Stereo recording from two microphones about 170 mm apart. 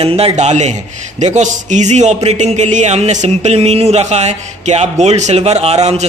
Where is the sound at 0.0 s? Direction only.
35° right (ahead or behind).